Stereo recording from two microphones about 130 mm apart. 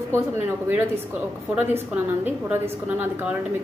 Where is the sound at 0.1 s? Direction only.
15° right (ahead or behind).